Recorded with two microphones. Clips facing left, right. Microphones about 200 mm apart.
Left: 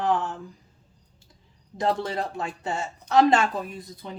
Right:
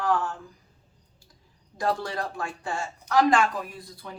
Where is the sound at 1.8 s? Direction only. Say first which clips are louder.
Left 2 dB; 20° left (ahead or behind).